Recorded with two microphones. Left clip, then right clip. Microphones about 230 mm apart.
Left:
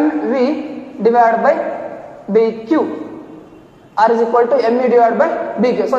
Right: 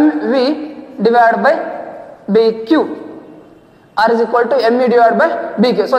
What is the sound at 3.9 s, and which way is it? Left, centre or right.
A man's voice, right.